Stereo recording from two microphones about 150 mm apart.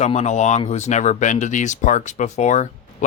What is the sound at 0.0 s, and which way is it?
Speech, 45° left (ahead or behind).